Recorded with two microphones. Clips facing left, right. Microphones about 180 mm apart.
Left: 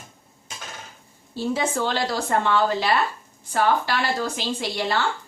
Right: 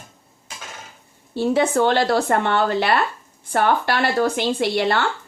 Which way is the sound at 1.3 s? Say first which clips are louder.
Right 6 dB; 60° right (ahead or behind).